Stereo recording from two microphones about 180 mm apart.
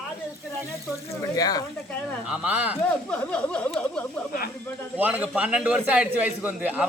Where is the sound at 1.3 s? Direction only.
20° left (ahead or behind).